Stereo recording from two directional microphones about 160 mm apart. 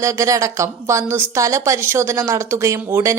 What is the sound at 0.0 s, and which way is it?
A woman's voice, 20° right (ahead or behind).